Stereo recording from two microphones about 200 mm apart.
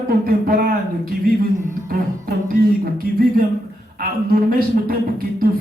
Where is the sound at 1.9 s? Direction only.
45° right (ahead or behind).